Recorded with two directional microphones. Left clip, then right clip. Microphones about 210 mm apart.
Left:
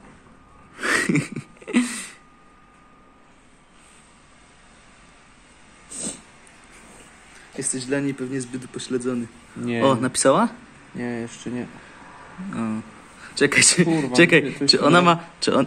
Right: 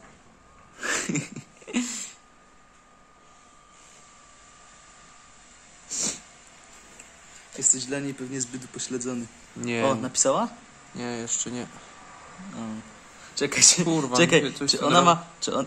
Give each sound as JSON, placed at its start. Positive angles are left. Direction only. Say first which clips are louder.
{"t": 0.7, "sound": "wheeze", "louder": "left 7 dB", "side_deg": 0}
{"t": 5.9, "sound": "a sound", "louder": "right 4 dB", "side_deg": -10}
{"t": 7.5, "sound": "speech", "louder": "left 2 dB", "side_deg": 0}
{"t": 9.8, "sound": "speech", "louder": "left 6 dB", "side_deg": 10}
{"t": 11.0, "sound": "a man's voice", "louder": "left 3 dB", "side_deg": -5}
{"t": 13.3, "sound": "speech", "louder": "left 4 dB", "side_deg": 10}
{"t": 13.8, "sound": "speech", "louder": "left 3 dB", "side_deg": -40}
{"t": 14.1, "sound": "a man's voice", "louder": "left 5 dB", "side_deg": 5}